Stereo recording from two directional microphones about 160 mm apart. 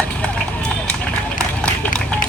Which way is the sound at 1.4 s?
5° left (ahead or behind).